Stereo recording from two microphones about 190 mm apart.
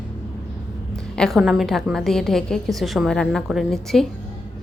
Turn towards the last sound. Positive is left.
turn(degrees=0)  # may be behind; listen again after turning